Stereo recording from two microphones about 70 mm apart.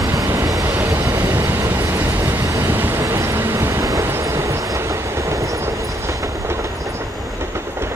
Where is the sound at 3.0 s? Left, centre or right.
Right.